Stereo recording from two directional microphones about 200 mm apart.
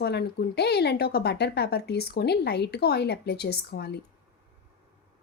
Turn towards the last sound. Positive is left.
turn(degrees=55)  # may be behind; listen again after turning